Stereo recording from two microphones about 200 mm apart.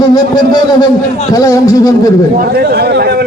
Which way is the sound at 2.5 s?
50° right (ahead or behind).